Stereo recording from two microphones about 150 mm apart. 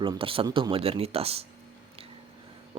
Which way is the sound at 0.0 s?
35° right (ahead or behind).